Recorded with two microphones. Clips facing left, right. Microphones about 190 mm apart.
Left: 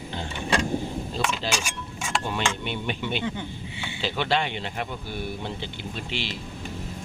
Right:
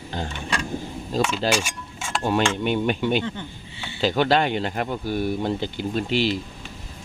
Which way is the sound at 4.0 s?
45° right (ahead or behind).